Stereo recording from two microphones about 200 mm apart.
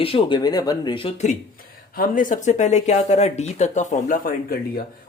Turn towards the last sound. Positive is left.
turn(degrees=45)  # may be behind; listen again after turning